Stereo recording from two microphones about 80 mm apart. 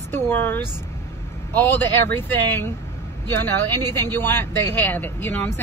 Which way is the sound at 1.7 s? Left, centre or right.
Left.